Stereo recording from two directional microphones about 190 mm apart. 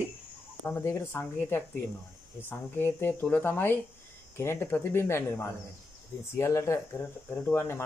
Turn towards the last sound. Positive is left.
turn(degrees=10)  # may be behind; listen again after turning